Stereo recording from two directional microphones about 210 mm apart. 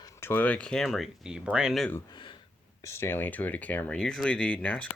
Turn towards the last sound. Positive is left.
turn(degrees=5)  # may be behind; listen again after turning